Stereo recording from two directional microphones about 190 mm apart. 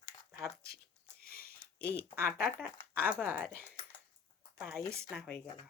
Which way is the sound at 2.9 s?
10° right (ahead or behind).